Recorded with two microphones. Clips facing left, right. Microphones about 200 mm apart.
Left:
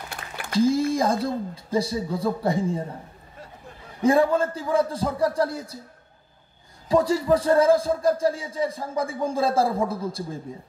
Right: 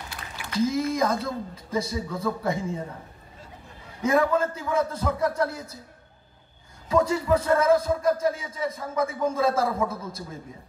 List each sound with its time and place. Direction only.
0.5 s a man's voice: 30° left (ahead or behind)
4.0 s a man's voice: 30° left (ahead or behind)
6.9 s a man's voice: 35° left (ahead or behind)